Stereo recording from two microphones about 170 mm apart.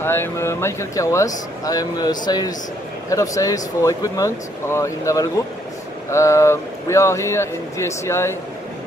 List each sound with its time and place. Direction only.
0.0 s a man's voice: 15° left (ahead or behind)